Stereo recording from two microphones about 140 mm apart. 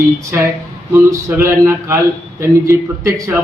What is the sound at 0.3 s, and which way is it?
A man's voice, 15° right (ahead or behind).